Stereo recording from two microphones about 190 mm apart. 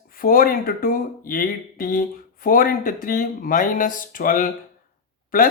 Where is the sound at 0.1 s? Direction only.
50° left (ahead or behind).